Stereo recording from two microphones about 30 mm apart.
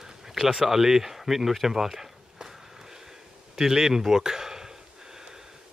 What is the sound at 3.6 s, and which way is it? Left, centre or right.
Speech, centre.